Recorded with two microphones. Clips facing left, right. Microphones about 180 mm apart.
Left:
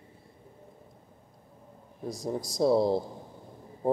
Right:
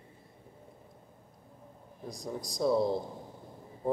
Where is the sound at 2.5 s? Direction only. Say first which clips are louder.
Left 4 dB; 35° left (ahead or behind).